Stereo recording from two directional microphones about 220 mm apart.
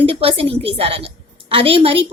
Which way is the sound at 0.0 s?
25° right (ahead or behind).